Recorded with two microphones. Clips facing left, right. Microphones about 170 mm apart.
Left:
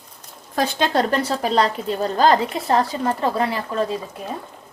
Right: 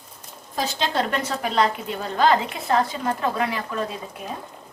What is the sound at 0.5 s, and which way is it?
A woman's voice, 50° left (ahead or behind).